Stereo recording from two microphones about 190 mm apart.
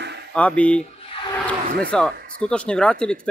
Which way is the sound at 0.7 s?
30° left (ahead or behind).